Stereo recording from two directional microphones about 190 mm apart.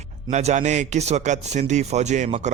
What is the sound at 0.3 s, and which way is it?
A man's voice, 40° right (ahead or behind).